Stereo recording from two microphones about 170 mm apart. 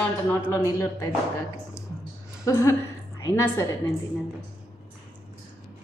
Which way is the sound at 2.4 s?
15° left (ahead or behind).